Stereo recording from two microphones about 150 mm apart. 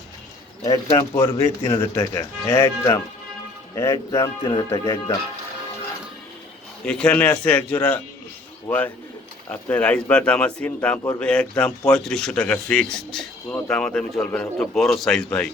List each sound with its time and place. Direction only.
0.9 s speech: 15° left (ahead or behind)
6.8 s speech: 5° left (ahead or behind)